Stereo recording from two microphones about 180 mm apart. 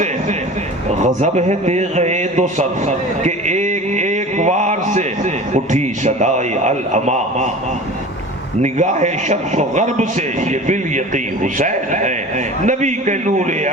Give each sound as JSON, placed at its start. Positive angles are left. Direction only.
{"t": 0.9, "sound": "a man's voice", "side_deg": -40}
{"t": 8.6, "sound": "a man's voice", "side_deg": -40}